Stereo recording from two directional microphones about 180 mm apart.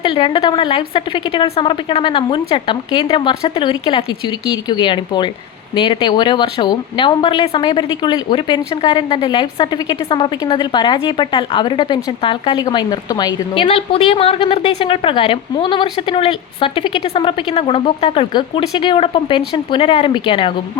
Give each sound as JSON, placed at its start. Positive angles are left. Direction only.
{"t": 0.0, "sound": "speech", "side_deg": 30}